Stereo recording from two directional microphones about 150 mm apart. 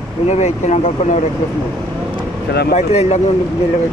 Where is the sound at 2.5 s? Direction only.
90° left.